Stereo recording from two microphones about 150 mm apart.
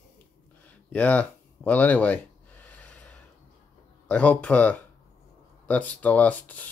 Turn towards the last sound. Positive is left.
turn(degrees=10)  # may be behind; listen again after turning